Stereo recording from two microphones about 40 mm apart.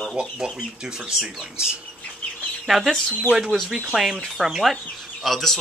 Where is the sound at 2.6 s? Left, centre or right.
Centre.